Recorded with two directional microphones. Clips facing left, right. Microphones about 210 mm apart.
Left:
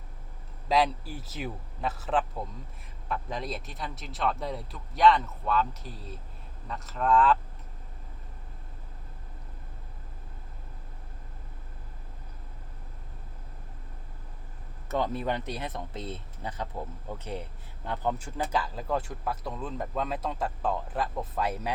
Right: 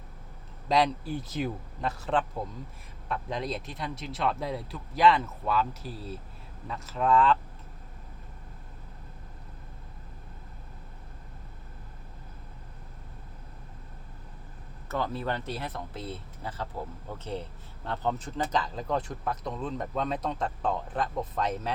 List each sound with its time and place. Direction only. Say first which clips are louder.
0.7 s speech: right 1 dB; 5° left (ahead or behind)
14.8 s speech: left 2 dB; 20° left (ahead or behind)
17.8 s speech: even; 10° left (ahead or behind)